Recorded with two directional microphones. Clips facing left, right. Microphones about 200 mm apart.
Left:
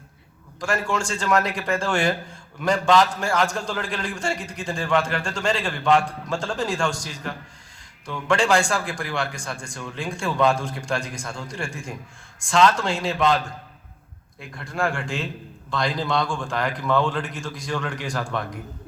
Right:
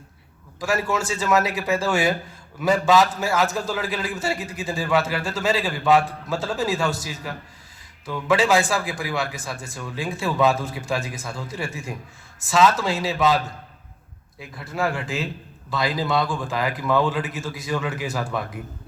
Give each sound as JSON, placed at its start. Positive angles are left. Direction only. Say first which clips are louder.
{"t": 0.6, "sound": "a man's voice", "louder": "right 1 dB", "side_deg": -5}
{"t": 14.5, "sound": "a man's voice", "louder": "right 1 dB", "side_deg": -5}